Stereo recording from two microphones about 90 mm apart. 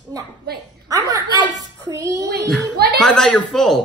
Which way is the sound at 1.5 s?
40° right (ahead or behind).